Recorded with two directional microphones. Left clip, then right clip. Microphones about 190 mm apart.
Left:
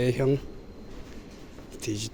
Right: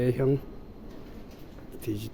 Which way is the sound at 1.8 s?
20° right (ahead or behind).